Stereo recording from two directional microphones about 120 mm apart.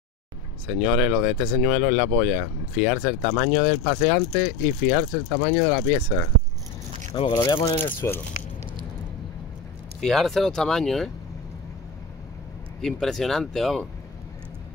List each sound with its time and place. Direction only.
0.8 s speech: 10° right (ahead or behind)
7.1 s speech: 35° left (ahead or behind)
7.8 s speech: 20° left (ahead or behind)
9.9 s speech: centre (ahead or behind)
12.8 s speech: centre (ahead or behind)